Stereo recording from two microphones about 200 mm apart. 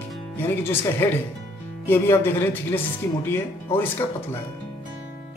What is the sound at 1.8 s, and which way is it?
A man's voice, 10° left (ahead or behind).